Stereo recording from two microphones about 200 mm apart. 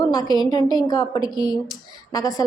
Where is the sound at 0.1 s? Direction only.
20° left (ahead or behind).